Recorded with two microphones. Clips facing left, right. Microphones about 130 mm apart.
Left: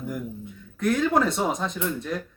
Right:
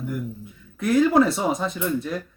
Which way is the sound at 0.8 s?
5° right (ahead or behind).